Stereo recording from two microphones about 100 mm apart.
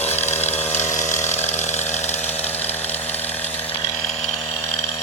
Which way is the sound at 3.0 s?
15° left (ahead or behind).